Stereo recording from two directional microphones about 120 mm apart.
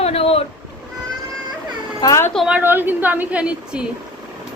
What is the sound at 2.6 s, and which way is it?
A woman's voice, 15° right (ahead or behind).